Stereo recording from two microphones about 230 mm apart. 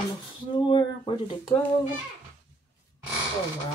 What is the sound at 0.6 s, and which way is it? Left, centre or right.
Speech, left.